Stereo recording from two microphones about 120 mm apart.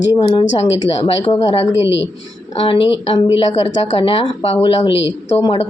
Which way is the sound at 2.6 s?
50° left (ahead or behind).